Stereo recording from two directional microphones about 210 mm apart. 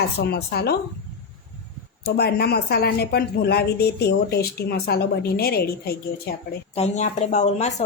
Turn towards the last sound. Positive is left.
turn(degrees=35)  # may be behind; listen again after turning